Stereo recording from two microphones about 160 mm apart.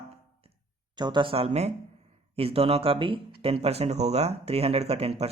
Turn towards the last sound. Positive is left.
turn(degrees=-40)  # may be behind; listen again after turning